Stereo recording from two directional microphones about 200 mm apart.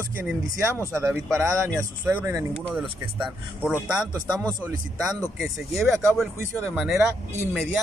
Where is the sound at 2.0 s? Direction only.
10° right (ahead or behind).